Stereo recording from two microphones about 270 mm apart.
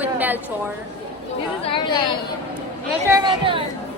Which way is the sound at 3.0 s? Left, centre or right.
Centre.